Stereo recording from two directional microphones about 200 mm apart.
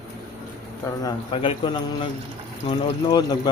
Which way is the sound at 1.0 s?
25° left (ahead or behind).